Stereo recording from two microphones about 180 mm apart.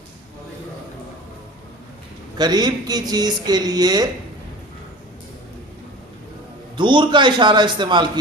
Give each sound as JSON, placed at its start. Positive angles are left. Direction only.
{"t": 2.4, "sound": "speech", "side_deg": -25}
{"t": 6.7, "sound": "speech", "side_deg": -25}